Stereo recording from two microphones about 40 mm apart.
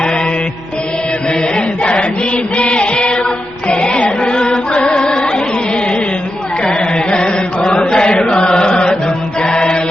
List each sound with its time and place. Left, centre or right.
1.3 s chant: left
3.7 s music: left
6.7 s chant: left